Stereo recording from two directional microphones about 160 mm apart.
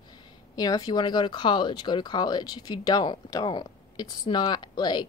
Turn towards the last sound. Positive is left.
turn(degrees=25)  # may be behind; listen again after turning